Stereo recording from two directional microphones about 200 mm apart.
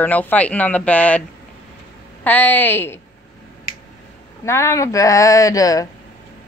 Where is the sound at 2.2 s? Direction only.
10° left (ahead or behind).